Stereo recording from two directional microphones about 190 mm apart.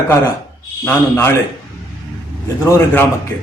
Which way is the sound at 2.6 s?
15° left (ahead or behind).